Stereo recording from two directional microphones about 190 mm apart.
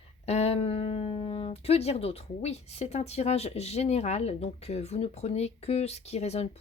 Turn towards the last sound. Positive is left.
turn(degrees=35)  # may be behind; listen again after turning